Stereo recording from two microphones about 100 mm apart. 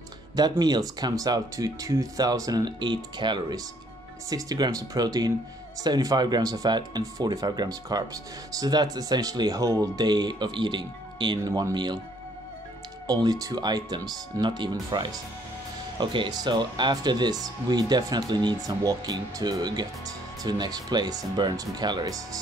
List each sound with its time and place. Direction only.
0.4 s speech: 45° right (ahead or behind)
4.3 s speech: 35° right (ahead or behind)
13.0 s speech: 40° right (ahead or behind)